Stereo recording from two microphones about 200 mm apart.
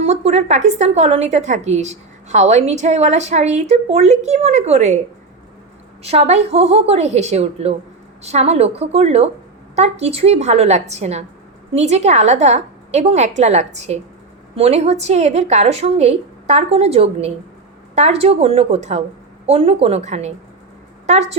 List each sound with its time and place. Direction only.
0.0 s a woman's voice: 30° right (ahead or behind)
6.0 s a woman's voice: 30° right (ahead or behind)